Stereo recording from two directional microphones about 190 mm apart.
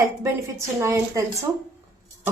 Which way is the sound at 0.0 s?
15° right (ahead or behind).